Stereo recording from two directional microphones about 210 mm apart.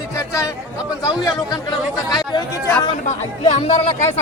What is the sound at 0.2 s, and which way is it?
Chatter, 15° left (ahead or behind).